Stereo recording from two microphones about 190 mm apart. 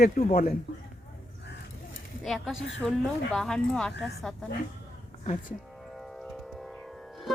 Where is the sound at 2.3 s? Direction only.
Centre (ahead or behind).